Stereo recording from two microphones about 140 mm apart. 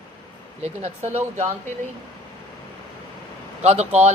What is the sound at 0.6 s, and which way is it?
Speech, 55° right (ahead or behind).